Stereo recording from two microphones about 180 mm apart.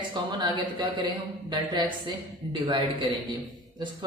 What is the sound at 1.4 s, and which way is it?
Speech, 25° right (ahead or behind).